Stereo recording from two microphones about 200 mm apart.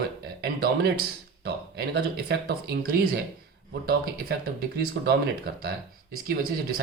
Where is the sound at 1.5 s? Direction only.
55° right (ahead or behind).